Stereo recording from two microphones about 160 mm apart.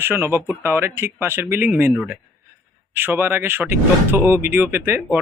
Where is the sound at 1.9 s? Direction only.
Centre (ahead or behind).